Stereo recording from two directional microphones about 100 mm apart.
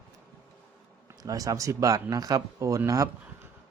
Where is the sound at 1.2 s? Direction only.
35° right (ahead or behind).